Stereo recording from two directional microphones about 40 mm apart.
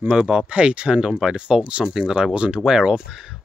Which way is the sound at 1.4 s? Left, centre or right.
Right.